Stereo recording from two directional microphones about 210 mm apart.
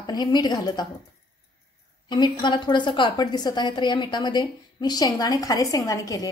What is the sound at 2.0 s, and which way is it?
A woman's voice, 20° left (ahead or behind).